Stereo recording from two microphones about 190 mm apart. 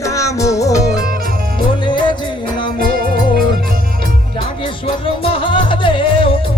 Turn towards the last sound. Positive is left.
turn(degrees=25)  # may be behind; listen again after turning